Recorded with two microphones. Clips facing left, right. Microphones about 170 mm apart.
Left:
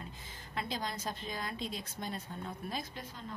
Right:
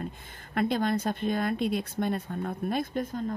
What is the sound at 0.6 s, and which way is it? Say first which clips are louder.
Speech: right 12 dB; 60° right (ahead or behind).